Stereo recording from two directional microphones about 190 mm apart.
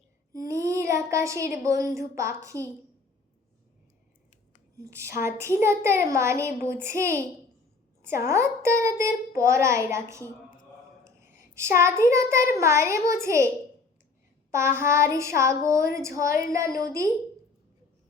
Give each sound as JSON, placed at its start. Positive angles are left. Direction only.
{"t": 0.4, "sound": "child singing", "side_deg": -15}
{"t": 1.6, "sound": "a child's voice", "side_deg": -15}
{"t": 4.8, "sound": "a child's voice", "side_deg": -15}
{"t": 8.3, "sound": "a child's voice", "side_deg": -15}
{"t": 14.5, "sound": "a child's voice", "side_deg": -15}